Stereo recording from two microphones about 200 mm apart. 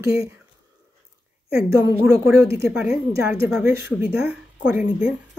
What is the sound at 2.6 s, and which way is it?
A woman's voice, 5° right (ahead or behind).